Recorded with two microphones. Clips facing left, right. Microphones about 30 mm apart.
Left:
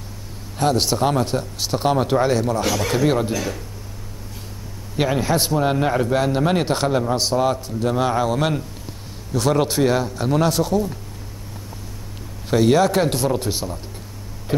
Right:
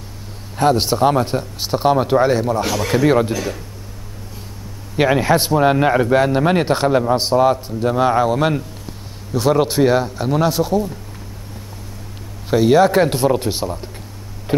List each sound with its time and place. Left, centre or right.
0.6 s a man's voice: centre
4.9 s a man's voice: centre
12.4 s a man's voice: centre